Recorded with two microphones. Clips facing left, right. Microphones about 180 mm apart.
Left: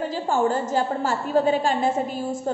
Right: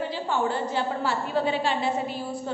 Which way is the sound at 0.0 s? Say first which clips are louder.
Left 4 dB; 45° left (ahead or behind).